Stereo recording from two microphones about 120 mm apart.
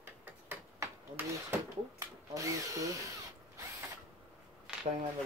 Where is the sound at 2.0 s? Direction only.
25° right (ahead or behind).